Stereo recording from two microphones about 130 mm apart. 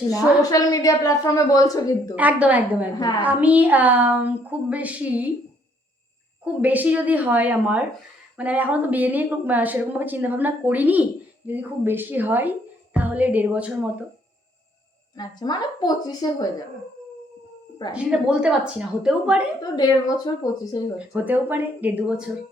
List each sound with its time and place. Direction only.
0.1 s a woman's voice: 25° left (ahead or behind)
2.1 s a woman's voice: 10° right (ahead or behind)
6.4 s a woman's voice: 10° right (ahead or behind)
15.1 s a woman's voice: 35° left (ahead or behind)
17.9 s a woman's voice: 5° right (ahead or behind)
19.5 s a woman's voice: 30° left (ahead or behind)
21.0 s a woman's voice: 15° right (ahead or behind)